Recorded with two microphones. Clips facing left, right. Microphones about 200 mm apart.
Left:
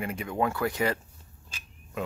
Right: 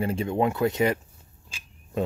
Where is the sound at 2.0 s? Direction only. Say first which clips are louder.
Right 6 dB; 35° right (ahead or behind).